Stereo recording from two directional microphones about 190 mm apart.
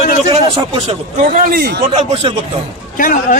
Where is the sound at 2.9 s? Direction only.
45° left (ahead or behind).